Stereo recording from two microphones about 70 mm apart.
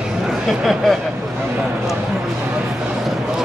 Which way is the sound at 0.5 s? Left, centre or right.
Centre.